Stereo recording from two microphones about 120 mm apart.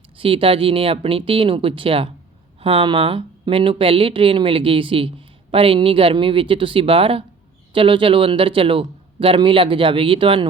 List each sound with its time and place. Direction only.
0.2 s speech: 50° right (ahead or behind)